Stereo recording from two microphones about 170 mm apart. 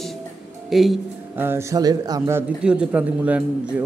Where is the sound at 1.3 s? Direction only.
15° right (ahead or behind).